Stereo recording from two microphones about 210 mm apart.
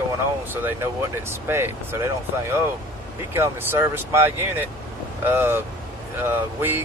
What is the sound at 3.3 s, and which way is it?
Speech, 10° right (ahead or behind).